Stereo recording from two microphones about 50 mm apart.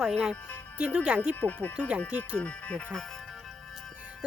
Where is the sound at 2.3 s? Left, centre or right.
Left.